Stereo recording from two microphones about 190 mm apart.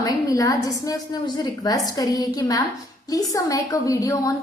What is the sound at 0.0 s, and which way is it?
A woman's voice, 20° left (ahead or behind).